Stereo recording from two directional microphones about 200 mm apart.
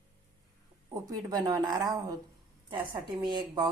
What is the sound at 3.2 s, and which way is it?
Speech, 20° right (ahead or behind).